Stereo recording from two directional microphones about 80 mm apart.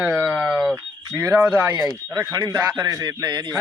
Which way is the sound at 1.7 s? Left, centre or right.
Right.